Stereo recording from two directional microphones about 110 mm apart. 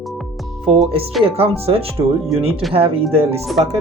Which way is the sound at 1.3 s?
60° right (ahead or behind).